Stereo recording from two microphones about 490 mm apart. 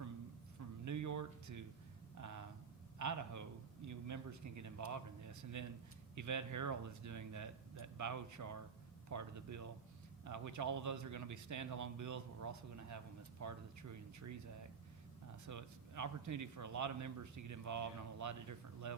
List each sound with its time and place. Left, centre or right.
0.9 s a sound: right
3.0 s a man's voice: right
15.4 s a man's voice: right